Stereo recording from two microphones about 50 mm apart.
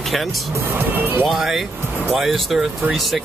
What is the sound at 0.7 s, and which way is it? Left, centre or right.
Speech, right.